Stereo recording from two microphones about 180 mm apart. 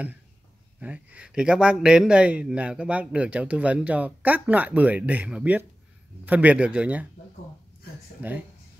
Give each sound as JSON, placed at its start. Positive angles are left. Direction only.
{"t": 0.7, "sound": "a man's voice", "side_deg": -5}
{"t": 8.2, "sound": "a man's voice", "side_deg": -10}